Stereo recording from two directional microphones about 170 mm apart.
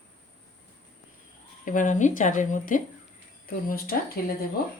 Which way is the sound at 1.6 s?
50° left (ahead or behind).